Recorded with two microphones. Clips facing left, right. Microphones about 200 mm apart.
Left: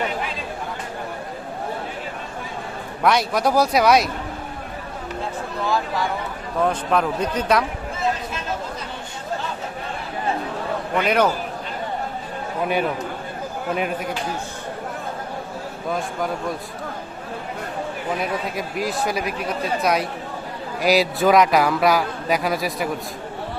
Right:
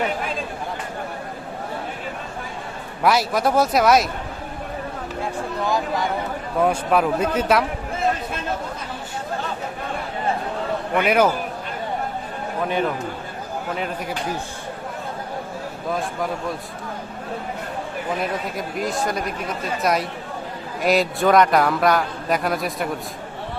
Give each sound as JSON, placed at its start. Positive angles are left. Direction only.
{"t": 3.0, "sound": "a man's voice", "side_deg": 0}
{"t": 5.6, "sound": "speech", "side_deg": -15}
{"t": 6.6, "sound": "a man's voice", "side_deg": -5}
{"t": 10.9, "sound": "speech", "side_deg": -5}
{"t": 18.2, "sound": "a man's voice", "side_deg": 0}